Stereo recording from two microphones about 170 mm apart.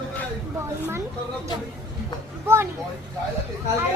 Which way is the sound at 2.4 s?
15° right (ahead or behind).